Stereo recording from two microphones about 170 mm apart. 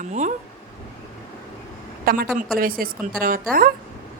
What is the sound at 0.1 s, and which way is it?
Speech, 45° right (ahead or behind).